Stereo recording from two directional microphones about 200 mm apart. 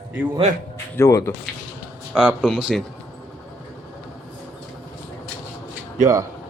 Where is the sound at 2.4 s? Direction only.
Centre (ahead or behind).